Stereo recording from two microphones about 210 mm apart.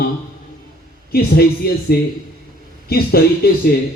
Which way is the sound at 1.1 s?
45° left (ahead or behind).